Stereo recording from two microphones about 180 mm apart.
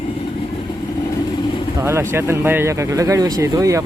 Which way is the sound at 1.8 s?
15° right (ahead or behind).